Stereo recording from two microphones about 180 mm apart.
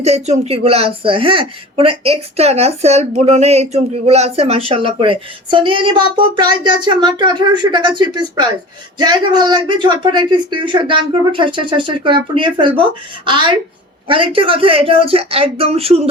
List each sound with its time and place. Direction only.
0.0 s a woman's voice: 35° right (ahead or behind)